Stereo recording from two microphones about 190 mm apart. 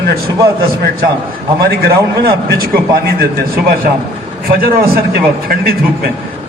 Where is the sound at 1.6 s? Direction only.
55° right (ahead or behind).